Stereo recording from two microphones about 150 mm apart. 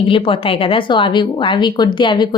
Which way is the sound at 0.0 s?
35° left (ahead or behind).